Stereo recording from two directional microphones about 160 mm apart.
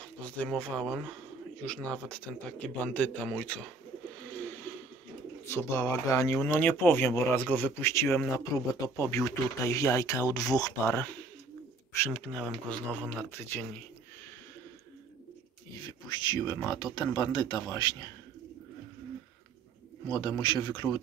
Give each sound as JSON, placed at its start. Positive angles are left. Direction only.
{"t": 0.2, "sound": "a man's voice", "side_deg": 5}
{"t": 5.4, "sound": "a man's voice", "side_deg": 15}
{"t": 12.1, "sound": "speech", "side_deg": 5}
{"t": 15.8, "sound": "a sound", "side_deg": 25}
{"t": 16.7, "sound": "speech", "side_deg": 25}
{"t": 20.1, "sound": "speech", "side_deg": 25}